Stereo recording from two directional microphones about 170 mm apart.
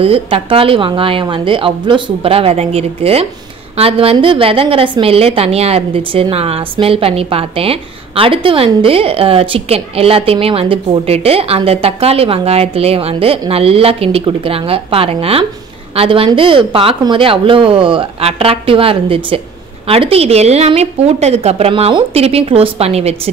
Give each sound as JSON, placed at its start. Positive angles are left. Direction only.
{"t": 0.0, "sound": "a woman's voice", "side_deg": -35}